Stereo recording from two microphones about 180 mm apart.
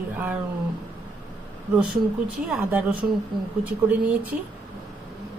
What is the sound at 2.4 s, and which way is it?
Speech, 5° right (ahead or behind).